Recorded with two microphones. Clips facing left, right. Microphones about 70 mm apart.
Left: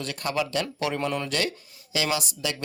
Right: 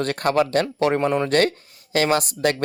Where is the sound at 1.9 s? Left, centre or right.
Right.